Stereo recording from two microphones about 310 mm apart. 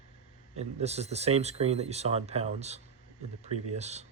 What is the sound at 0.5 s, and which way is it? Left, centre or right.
Speech, right.